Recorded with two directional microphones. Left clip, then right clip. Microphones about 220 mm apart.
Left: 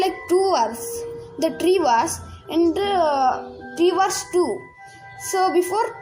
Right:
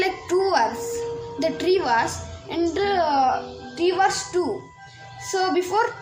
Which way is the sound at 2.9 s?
35° left (ahead or behind).